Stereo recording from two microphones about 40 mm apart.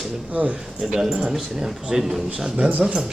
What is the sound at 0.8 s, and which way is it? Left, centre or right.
Speech, centre.